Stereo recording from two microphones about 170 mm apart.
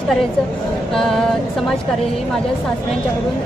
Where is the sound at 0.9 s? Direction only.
5° left (ahead or behind).